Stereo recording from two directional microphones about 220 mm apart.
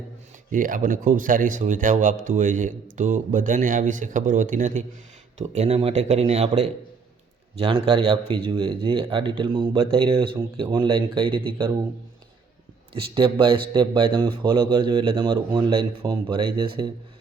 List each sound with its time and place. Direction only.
0.5 s speech: 35° right (ahead or behind); by 11.7 s 20° right (ahead or behind)
12.9 s speech: 25° right (ahead or behind)